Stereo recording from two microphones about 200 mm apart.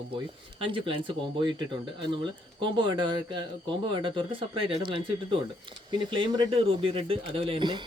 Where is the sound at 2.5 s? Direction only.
25° right (ahead or behind).